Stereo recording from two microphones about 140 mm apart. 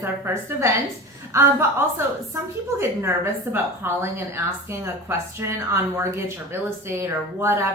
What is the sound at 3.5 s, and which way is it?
A woman's voice, 20° right (ahead or behind).